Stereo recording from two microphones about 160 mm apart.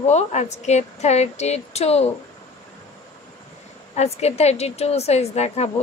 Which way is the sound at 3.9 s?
40° left (ahead or behind).